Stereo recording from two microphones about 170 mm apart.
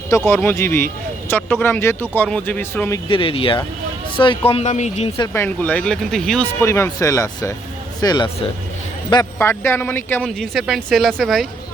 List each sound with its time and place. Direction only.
0.3 s speech: 10° left (ahead or behind)
3.1 s speech: 30° left (ahead or behind)
5.1 s speech: 15° left (ahead or behind)
6.6 s speech: 15° left (ahead or behind)
9.4 s speech: 15° left (ahead or behind)